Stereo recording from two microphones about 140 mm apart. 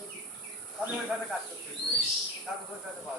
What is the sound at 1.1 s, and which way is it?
Speech, 5° right (ahead or behind).